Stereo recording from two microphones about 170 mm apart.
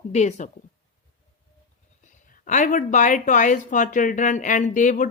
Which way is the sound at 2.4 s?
50° left (ahead or behind).